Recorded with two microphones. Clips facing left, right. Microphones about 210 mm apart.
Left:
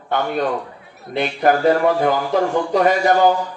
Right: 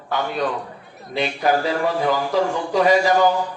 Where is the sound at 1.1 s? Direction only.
55° left (ahead or behind).